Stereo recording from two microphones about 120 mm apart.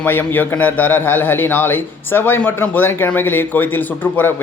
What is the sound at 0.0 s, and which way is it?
A man's voice, 15° left (ahead or behind).